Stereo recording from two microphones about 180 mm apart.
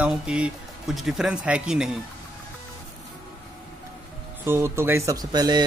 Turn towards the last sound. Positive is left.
turn(degrees=-20)  # may be behind; listen again after turning